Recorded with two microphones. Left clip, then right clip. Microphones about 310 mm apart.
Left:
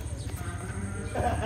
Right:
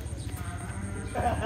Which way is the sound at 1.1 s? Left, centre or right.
Centre.